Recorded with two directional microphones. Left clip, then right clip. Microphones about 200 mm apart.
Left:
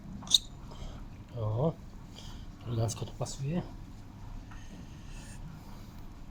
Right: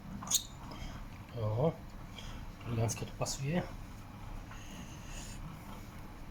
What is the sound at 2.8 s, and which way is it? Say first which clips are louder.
Speech: even; 30° left (ahead or behind).